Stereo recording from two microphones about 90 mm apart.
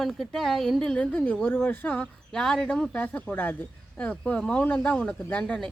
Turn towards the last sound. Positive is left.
turn(degrees=10)  # may be behind; listen again after turning